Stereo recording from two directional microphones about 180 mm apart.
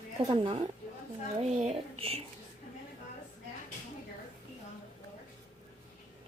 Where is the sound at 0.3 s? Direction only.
30° right (ahead or behind).